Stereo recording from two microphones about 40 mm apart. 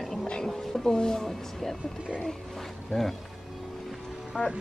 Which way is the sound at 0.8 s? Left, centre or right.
Centre.